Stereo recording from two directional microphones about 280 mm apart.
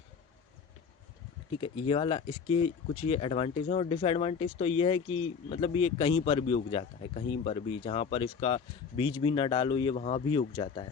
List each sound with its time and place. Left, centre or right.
1.6 s speech: centre